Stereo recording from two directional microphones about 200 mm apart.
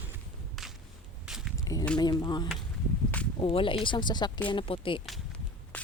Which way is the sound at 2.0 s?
20° left (ahead or behind).